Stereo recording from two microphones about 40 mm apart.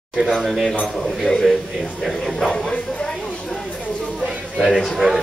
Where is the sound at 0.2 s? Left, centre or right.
Centre.